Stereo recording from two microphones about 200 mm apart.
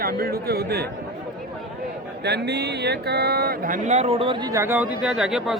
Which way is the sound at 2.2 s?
55° right (ahead or behind).